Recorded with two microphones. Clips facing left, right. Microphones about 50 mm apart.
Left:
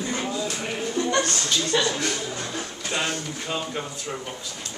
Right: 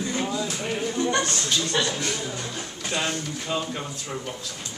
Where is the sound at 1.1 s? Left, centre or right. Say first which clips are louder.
Left 1 dB; centre.